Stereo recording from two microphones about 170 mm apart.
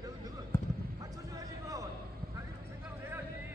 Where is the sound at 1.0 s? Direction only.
20° right (ahead or behind).